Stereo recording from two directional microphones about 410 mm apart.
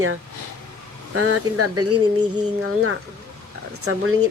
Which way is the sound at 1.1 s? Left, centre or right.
Right.